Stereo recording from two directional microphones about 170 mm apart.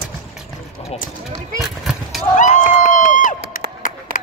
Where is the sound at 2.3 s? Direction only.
50° left (ahead or behind).